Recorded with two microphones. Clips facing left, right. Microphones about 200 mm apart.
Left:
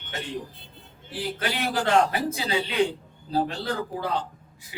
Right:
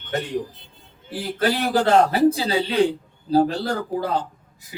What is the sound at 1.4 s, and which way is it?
A man's voice, 35° right (ahead or behind).